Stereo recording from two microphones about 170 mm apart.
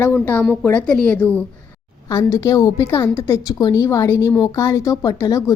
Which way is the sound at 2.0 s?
20° left (ahead or behind).